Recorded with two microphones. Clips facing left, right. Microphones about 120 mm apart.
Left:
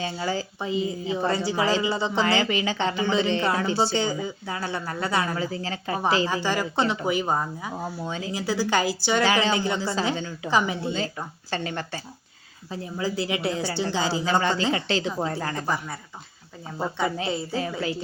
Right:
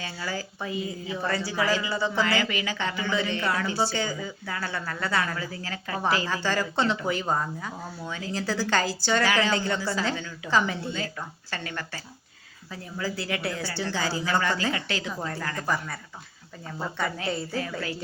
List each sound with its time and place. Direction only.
0.0 s speech: 25° left (ahead or behind)
10.9 s speech: 25° left (ahead or behind)